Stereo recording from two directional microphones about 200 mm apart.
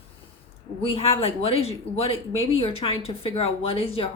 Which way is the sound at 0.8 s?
30° left (ahead or behind).